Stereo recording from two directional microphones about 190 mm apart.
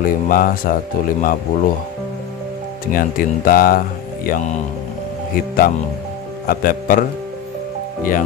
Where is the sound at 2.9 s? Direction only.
50° left (ahead or behind).